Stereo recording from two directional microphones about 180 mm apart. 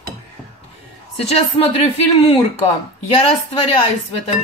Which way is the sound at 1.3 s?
35° left (ahead or behind).